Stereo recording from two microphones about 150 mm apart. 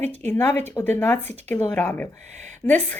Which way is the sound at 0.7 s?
15° left (ahead or behind).